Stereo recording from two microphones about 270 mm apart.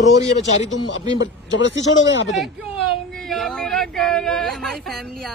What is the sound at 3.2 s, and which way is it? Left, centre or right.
Speech, centre.